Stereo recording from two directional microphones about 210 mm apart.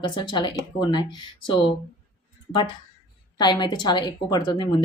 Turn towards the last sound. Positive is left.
turn(degrees=20)  # may be behind; listen again after turning